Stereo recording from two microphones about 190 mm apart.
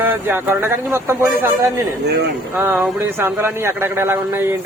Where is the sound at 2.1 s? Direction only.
60° right (ahead or behind).